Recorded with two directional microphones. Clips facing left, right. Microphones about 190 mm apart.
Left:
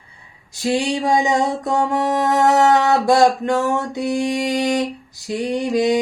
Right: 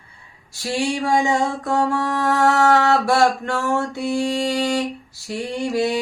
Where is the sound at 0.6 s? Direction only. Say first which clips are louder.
Left 3 dB; 20° left (ahead or behind).